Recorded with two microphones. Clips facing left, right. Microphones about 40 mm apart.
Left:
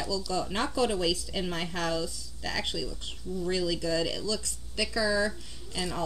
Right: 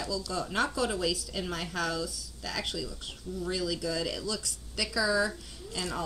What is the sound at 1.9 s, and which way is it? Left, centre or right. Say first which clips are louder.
Speech: left 3 dB; centre.